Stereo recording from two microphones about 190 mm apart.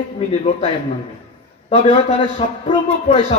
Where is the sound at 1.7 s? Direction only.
35° left (ahead or behind).